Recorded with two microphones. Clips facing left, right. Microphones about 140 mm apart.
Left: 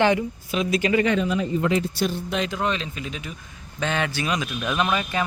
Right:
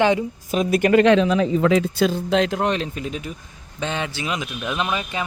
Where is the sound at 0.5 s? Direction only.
55° right (ahead or behind).